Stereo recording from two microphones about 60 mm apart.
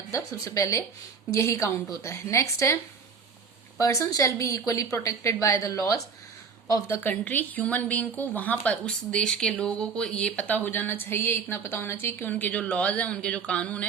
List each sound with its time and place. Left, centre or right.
0.3 s a woman's voice: left
3.8 s speech: left
4.9 s speech: left
7.0 s speech: left
8.9 s speech: centre
10.7 s a woman's voice: left
12.3 s speech: left